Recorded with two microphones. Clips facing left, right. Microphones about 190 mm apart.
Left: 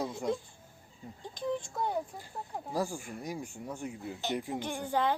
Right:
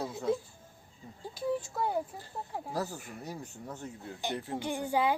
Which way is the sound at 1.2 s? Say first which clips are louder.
Right 2 dB; 5° right (ahead or behind).